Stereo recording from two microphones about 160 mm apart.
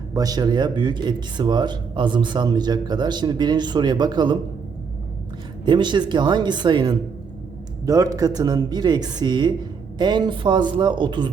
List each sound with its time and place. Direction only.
0.1 s speech: 25° right (ahead or behind)
5.6 s speech: 30° right (ahead or behind)